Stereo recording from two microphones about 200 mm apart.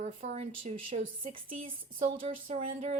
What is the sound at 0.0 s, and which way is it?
Speech, 35° right (ahead or behind).